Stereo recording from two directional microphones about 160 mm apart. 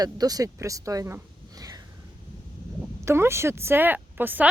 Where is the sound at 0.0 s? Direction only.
25° right (ahead or behind).